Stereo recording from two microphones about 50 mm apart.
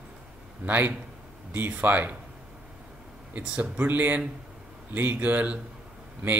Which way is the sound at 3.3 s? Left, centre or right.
Right.